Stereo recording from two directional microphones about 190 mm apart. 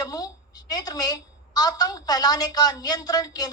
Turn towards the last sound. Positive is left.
turn(degrees=20)  # may be behind; listen again after turning